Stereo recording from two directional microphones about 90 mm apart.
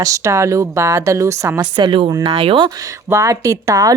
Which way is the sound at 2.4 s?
90° right.